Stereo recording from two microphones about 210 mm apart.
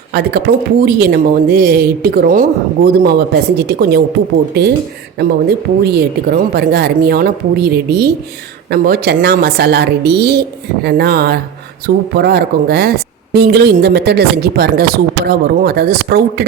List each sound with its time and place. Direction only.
0.1 s speech: 50° right (ahead or behind)